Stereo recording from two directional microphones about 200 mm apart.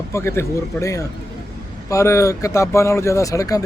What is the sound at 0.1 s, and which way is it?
Speech, 15° left (ahead or behind).